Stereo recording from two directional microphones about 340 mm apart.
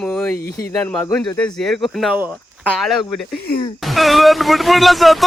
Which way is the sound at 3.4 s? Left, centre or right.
Left.